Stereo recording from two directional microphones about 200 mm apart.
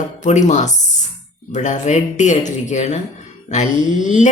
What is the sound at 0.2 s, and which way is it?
Speech, 35° left (ahead or behind).